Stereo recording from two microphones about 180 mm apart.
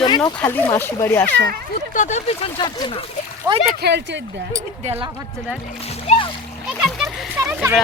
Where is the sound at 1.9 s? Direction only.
40° left (ahead or behind).